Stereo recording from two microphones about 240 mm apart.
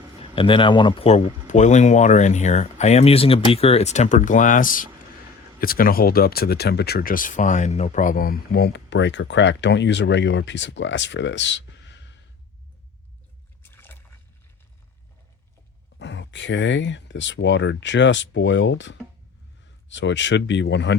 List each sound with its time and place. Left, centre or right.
0.2 s speech: left
13.6 s rowboat: centre
16.0 s speech: left